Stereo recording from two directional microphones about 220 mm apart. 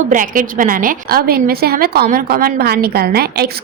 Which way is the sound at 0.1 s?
35° right (ahead or behind).